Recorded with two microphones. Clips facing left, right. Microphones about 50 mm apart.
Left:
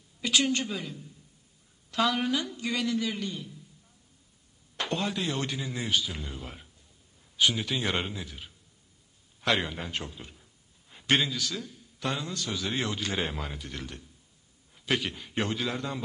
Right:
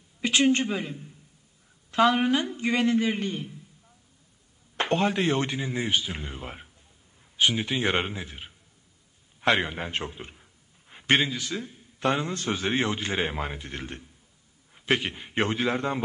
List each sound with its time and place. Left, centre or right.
0.2 s a man's voice: right
4.7 s a man's voice: right